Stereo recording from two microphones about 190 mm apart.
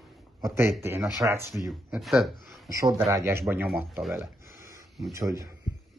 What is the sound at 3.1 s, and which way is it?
Speech, 15° right (ahead or behind).